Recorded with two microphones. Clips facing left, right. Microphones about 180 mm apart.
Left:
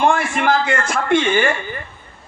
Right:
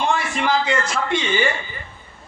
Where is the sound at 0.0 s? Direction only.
55° left (ahead or behind).